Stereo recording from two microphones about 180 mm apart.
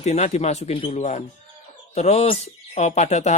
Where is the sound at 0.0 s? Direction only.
40° left (ahead or behind).